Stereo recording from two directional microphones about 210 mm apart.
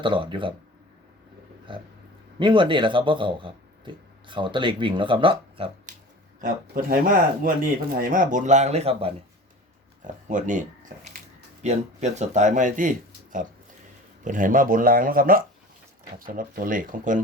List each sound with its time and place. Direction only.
0.0 s speech: 25° right (ahead or behind)
2.4 s speech: 25° right (ahead or behind)
6.4 s speech: 40° right (ahead or behind)
14.3 s speech: 40° right (ahead or behind)